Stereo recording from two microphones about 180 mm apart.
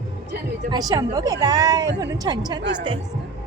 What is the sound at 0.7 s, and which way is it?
A woman's voice, 20° right (ahead or behind).